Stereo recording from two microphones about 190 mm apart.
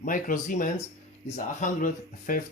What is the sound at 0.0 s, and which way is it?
Speech, 45° left (ahead or behind).